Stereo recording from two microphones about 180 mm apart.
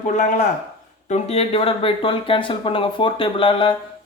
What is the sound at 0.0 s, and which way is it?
Speech, 40° left (ahead or behind).